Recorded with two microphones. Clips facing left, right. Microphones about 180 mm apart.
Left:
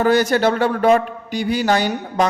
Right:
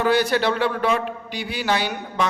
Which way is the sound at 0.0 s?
45° left (ahead or behind).